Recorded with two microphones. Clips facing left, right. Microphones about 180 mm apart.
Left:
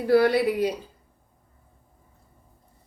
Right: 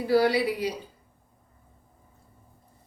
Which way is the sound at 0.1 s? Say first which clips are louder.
Left 3 dB; 55° left (ahead or behind).